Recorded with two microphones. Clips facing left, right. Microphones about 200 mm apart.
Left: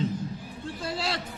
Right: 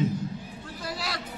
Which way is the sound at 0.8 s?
25° left (ahead or behind).